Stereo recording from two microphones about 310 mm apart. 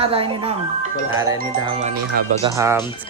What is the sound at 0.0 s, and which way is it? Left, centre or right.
Speech, centre.